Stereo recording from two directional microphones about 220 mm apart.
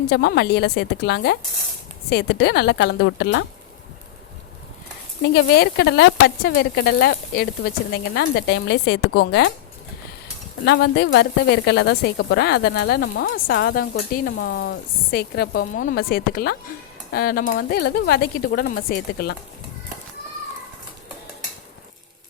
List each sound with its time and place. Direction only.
0.1 s speech: 45° left (ahead or behind)
5.3 s speech: 50° left (ahead or behind)
10.7 s speech: 50° left (ahead or behind)